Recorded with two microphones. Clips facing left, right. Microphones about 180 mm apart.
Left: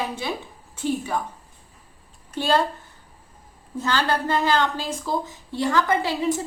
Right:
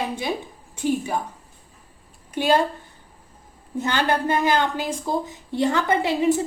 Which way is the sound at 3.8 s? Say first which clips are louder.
Right 1 dB; 20° right (ahead or behind).